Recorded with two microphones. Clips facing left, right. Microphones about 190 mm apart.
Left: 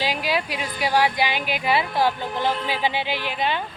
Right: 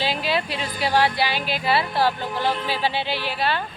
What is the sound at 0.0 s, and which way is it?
Speech, 10° left (ahead or behind).